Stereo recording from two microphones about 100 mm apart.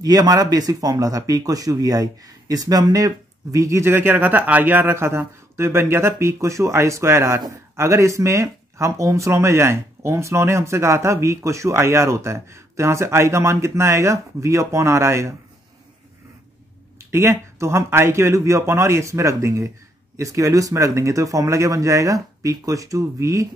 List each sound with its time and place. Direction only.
0.0 s speech: 40° right (ahead or behind)
17.0 s speech: 25° right (ahead or behind)